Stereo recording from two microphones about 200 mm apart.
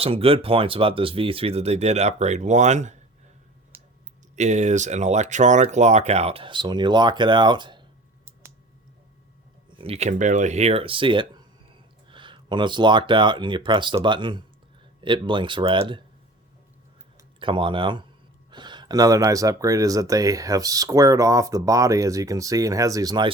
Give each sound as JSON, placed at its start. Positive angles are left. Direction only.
{"t": 0.0, "sound": "speech", "side_deg": -30}
{"t": 4.4, "sound": "speech", "side_deg": -35}
{"t": 9.7, "sound": "speech", "side_deg": -30}
{"t": 17.4, "sound": "speech", "side_deg": -25}